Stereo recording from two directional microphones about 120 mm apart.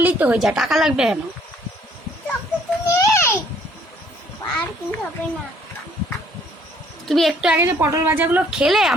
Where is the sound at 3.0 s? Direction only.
20° left (ahead or behind).